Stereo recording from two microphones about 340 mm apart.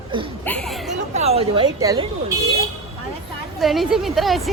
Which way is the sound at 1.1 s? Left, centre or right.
Centre.